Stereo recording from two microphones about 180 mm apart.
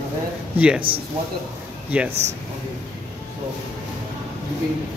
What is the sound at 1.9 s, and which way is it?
Speech, 10° right (ahead or behind).